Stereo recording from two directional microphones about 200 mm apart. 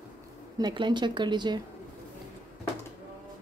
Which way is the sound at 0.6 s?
20° right (ahead or behind).